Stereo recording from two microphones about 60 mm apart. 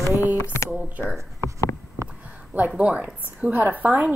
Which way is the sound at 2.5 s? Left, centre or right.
Right.